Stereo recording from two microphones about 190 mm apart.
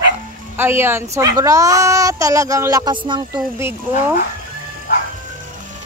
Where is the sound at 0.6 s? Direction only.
10° right (ahead or behind).